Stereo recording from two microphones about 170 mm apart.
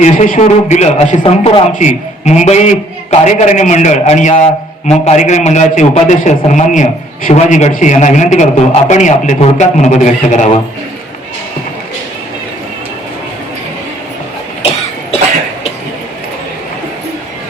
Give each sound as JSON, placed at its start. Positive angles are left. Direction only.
{"t": 0.0, "sound": "a man's voice", "side_deg": 45}